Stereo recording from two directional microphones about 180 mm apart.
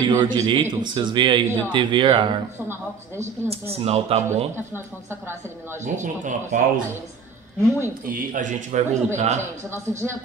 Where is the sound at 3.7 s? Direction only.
35° right (ahead or behind).